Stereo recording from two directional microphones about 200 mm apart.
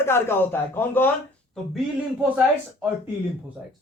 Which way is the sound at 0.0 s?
10° left (ahead or behind).